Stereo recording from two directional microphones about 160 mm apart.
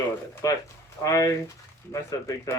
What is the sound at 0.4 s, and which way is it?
Speech, 20° left (ahead or behind).